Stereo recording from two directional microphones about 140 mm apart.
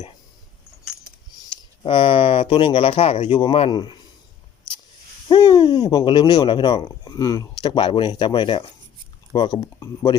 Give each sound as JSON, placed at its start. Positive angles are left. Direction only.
{"t": 1.8, "sound": "speech", "side_deg": 40}
{"t": 5.3, "sound": "speech", "side_deg": 35}